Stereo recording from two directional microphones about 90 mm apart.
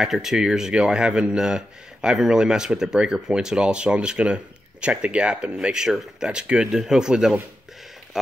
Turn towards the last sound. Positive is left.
turn(degrees=-5)  # may be behind; listen again after turning